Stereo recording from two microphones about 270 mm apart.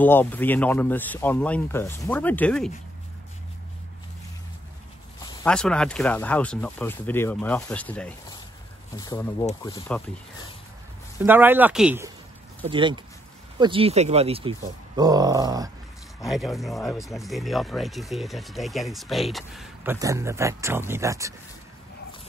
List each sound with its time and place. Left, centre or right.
0.0 s speech: centre
5.2 s speech: centre
11.1 s speech: centre
12.6 s speech: centre
16.3 s speech: centre